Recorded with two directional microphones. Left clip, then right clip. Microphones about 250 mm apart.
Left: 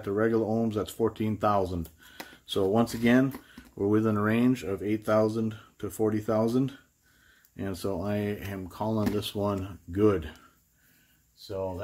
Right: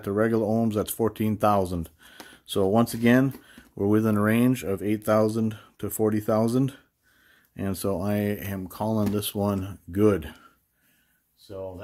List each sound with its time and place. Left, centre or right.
0.0 s speech: right
11.4 s speech: centre